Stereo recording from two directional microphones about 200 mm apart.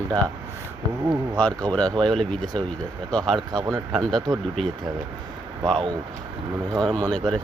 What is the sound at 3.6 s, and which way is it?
Speech, 15° right (ahead or behind).